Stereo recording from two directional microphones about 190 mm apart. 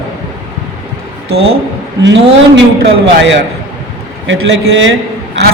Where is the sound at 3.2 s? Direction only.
70° right (ahead or behind).